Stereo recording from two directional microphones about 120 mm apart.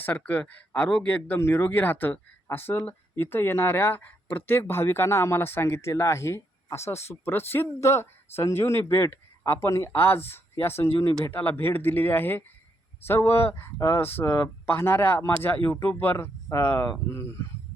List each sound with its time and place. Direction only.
0.0 s speech: 15° left (ahead or behind)